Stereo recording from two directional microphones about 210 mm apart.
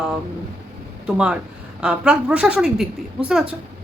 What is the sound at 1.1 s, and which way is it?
A woman's voice, 5° right (ahead or behind).